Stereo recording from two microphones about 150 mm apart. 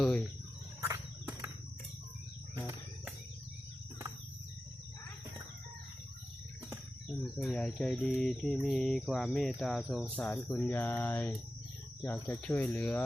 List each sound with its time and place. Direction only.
0.8 s wild animals: 20° right (ahead or behind)
7.1 s cricket: 5° left (ahead or behind)
10.2 s speech: 10° left (ahead or behind)